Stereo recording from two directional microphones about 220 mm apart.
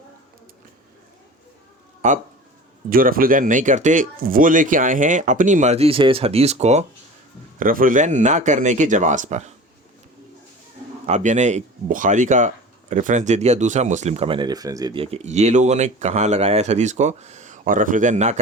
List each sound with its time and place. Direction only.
2.9 s speech: 40° right (ahead or behind)
11.0 s speech: 30° right (ahead or behind)